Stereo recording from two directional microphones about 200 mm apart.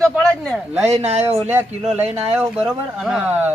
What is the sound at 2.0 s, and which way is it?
Speech, 10° right (ahead or behind).